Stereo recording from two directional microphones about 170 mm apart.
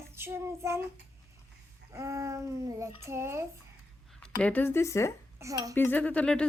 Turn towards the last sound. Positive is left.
turn(degrees=5)  # may be behind; listen again after turning